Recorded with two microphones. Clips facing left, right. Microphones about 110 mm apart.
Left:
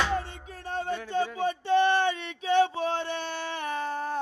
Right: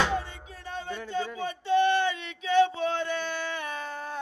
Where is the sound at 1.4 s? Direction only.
40° left (ahead or behind).